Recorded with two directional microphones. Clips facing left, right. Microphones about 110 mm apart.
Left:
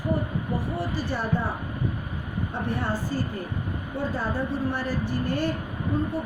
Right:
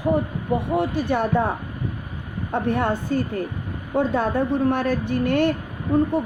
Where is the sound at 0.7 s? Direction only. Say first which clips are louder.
Right 8 dB; 60° right (ahead or behind).